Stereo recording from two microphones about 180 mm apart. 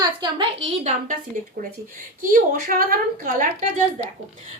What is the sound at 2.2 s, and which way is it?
Speech, 50° right (ahead or behind).